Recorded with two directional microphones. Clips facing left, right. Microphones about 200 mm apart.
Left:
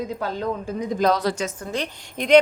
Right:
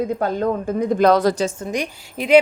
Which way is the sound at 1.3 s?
30° right (ahead or behind).